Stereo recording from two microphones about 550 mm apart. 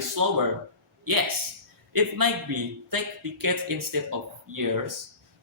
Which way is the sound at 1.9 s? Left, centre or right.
Right.